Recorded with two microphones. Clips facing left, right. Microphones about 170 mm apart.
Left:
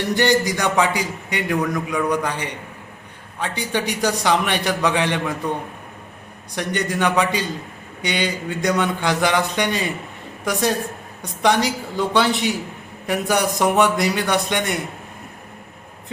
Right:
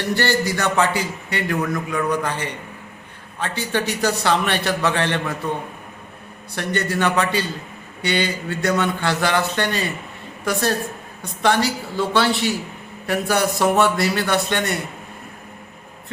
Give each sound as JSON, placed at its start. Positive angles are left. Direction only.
{"t": 0.1, "sound": "a man's voice", "side_deg": 15}
{"t": 6.6, "sound": "a man's voice", "side_deg": 15}